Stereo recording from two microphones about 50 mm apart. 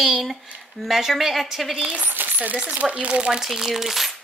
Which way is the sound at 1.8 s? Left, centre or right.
Right.